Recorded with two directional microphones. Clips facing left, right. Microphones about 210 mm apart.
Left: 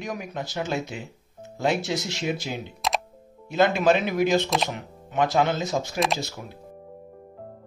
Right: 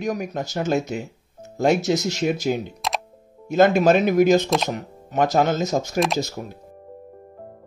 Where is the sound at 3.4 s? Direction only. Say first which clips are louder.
Right 5 dB; 45° right (ahead or behind).